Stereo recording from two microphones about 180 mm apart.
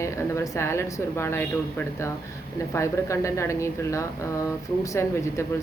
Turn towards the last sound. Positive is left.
turn(degrees=15)  # may be behind; listen again after turning